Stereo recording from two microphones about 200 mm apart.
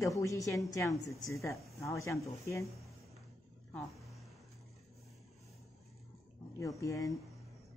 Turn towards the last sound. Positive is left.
turn(degrees=15)  # may be behind; listen again after turning